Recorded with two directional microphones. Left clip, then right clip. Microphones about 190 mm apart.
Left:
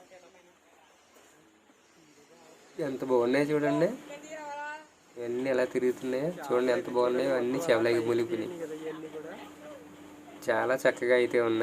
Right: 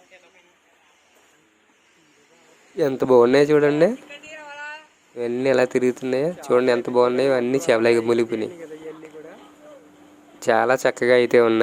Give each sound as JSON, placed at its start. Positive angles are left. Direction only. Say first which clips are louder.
{"t": 2.7, "sound": "speech", "louder": "right 12 dB", "side_deg": -45}
{"t": 4.3, "sound": "a sound", "louder": "right 3 dB", "side_deg": 25}
{"t": 5.1, "sound": "speech", "louder": "right 10 dB", "side_deg": -45}
{"t": 10.4, "sound": "speech", "louder": "right 8 dB", "side_deg": -45}